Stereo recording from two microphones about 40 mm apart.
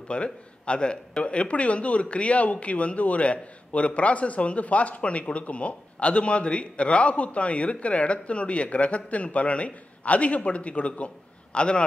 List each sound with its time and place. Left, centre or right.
0.1 s speech: left